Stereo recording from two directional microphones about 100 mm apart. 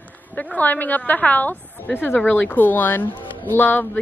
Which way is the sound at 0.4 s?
15° left (ahead or behind).